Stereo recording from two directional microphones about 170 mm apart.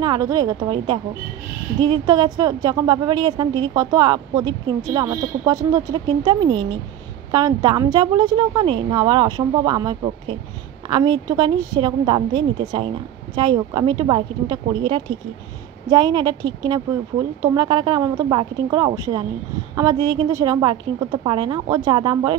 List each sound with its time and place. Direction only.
0.0 s a woman's voice: 25° right (ahead or behind)